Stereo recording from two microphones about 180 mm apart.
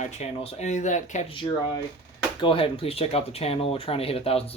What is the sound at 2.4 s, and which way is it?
Speech, 30° left (ahead or behind).